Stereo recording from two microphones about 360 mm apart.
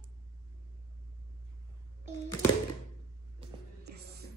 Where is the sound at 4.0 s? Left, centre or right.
Right.